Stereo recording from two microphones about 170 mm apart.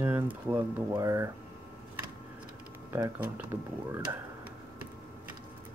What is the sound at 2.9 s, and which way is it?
Speech, 15° right (ahead or behind).